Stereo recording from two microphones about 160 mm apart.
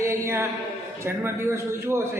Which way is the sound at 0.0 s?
15° right (ahead or behind).